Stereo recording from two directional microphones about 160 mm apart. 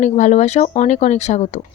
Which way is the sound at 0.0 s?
50° left (ahead or behind).